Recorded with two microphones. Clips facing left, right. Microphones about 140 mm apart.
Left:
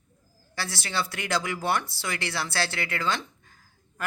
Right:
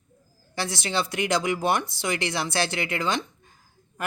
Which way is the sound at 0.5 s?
20° right (ahead or behind).